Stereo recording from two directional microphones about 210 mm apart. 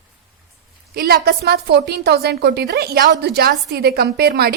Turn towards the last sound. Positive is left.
turn(degrees=-50)  # may be behind; listen again after turning